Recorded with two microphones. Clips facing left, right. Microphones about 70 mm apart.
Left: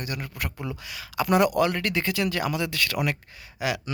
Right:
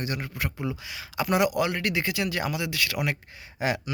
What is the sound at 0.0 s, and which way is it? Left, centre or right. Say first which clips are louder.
Speech: right 2 dB; right.